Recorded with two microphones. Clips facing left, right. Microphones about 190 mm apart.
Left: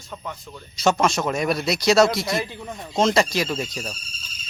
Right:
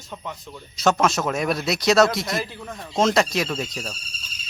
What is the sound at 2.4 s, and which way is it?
Speech, 15° left (ahead or behind).